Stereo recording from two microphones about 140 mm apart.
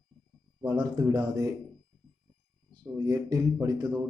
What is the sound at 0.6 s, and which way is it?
Speech, 30° right (ahead or behind).